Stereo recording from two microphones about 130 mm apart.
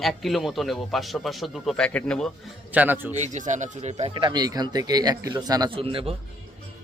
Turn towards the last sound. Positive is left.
turn(degrees=-45)  # may be behind; listen again after turning